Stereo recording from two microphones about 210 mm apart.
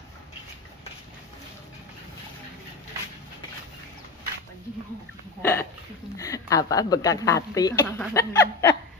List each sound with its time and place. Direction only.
5.4 s speech: 10° left (ahead or behind)